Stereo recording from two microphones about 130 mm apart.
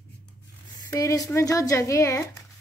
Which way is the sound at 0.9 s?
25° left (ahead or behind).